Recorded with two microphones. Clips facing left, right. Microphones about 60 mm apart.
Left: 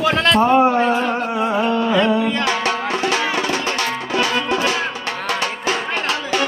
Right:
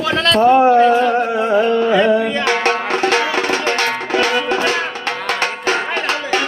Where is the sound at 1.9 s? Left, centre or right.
Centre.